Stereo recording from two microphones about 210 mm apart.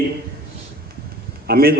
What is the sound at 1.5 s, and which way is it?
Speech, 45° right (ahead or behind).